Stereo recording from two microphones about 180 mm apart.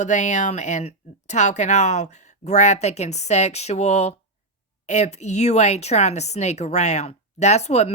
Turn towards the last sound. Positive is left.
turn(degrees=35)  # may be behind; listen again after turning